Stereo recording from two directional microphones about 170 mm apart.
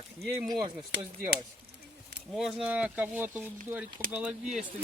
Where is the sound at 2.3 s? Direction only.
5° right (ahead or behind).